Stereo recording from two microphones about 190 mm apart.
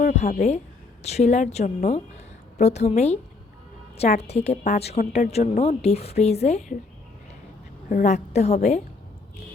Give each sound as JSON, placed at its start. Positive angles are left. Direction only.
{"t": 0.0, "sound": "a woman's voice", "side_deg": 45}
{"t": 7.9, "sound": "a woman's voice", "side_deg": 40}